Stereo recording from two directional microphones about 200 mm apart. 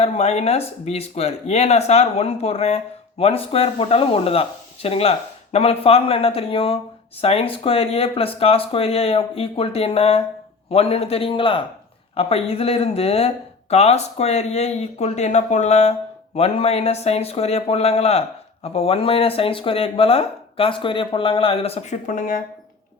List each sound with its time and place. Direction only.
0.0 s speech: 30° left (ahead or behind)